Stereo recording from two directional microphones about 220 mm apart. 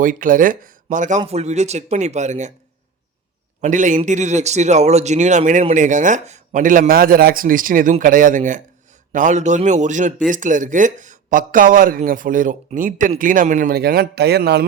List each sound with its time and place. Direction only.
0.0 s a man's voice: 40° right (ahead or behind)
3.6 s a man's voice: 35° right (ahead or behind)